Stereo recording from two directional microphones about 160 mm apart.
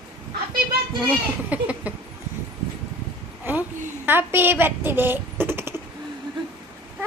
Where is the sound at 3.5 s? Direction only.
15° right (ahead or behind).